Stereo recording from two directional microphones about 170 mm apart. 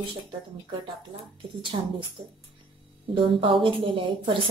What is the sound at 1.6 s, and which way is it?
Speech, 30° right (ahead or behind).